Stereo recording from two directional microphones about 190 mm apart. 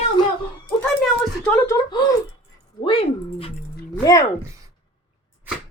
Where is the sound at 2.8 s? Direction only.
30° left (ahead or behind).